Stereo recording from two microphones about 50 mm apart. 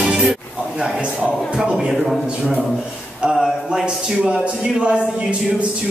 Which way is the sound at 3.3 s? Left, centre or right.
Centre.